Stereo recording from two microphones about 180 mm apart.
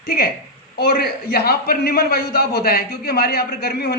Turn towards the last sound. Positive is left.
turn(degrees=60)  # may be behind; listen again after turning